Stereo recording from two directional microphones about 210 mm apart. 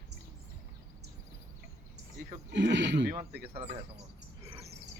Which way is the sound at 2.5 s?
55° right (ahead or behind).